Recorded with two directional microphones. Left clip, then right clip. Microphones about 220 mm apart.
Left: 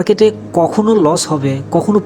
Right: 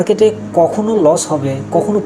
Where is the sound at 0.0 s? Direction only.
45° left (ahead or behind).